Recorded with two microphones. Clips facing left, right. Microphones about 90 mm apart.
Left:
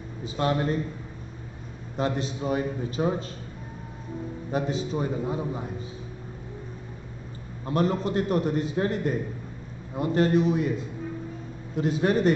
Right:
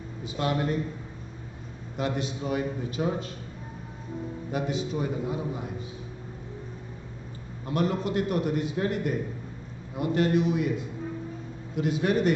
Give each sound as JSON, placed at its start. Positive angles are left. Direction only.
{"t": 0.2, "sound": "a man's voice", "side_deg": 35}
{"t": 2.0, "sound": "a man's voice", "side_deg": 35}
{"t": 4.5, "sound": "a man's voice", "side_deg": 35}
{"t": 7.6, "sound": "a man's voice", "side_deg": 35}